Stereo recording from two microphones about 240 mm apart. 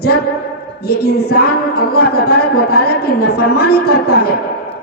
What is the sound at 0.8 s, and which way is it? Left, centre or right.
A man's voice, left.